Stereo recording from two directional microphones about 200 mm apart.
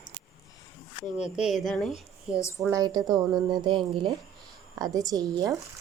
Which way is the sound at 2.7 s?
20° right (ahead or behind).